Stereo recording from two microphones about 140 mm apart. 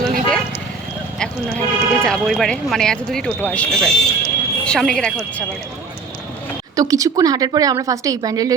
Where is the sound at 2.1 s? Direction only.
Centre (ahead or behind).